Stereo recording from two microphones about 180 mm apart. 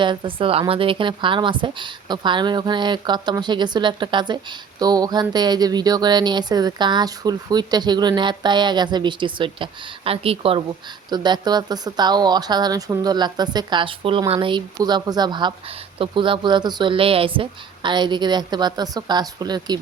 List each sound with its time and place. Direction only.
0.0 s speech: 25° right (ahead or behind)